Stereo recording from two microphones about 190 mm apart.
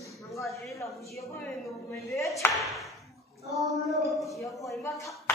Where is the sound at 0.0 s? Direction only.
15° left (ahead or behind).